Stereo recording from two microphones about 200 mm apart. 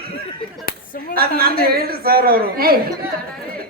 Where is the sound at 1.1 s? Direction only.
50° right (ahead or behind).